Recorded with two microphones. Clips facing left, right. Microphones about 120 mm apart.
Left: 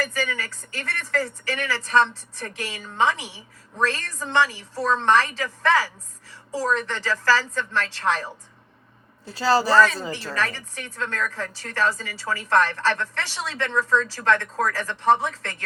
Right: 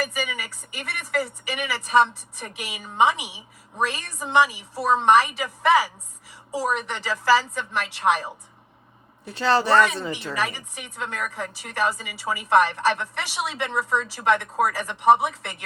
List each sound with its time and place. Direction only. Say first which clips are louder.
0.0 s speech: left 1 dB; 15° right (ahead or behind)
9.7 s a woman's voice: left 1 dB; 25° right (ahead or behind)